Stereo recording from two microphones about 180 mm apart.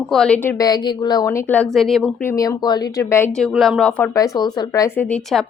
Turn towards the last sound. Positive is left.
turn(degrees=0)  # may be behind; listen again after turning